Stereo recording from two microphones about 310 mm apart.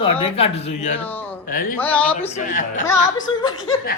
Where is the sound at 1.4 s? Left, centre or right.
Left.